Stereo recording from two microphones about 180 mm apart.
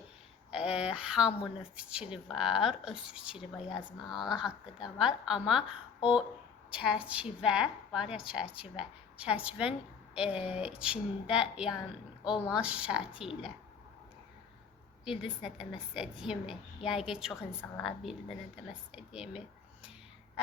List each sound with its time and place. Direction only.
0.5 s a sound: 5° right (ahead or behind)
1.3 s speech: 35° left (ahead or behind)
1.7 s a woman's voice: 5° right (ahead or behind)
3.6 s speech: 25° left (ahead or behind)
4.1 s a woman's voice: centre (ahead or behind)
10.5 s a woman's voice: 5° right (ahead or behind)
15.0 s a woman's voice: 5° right (ahead or behind)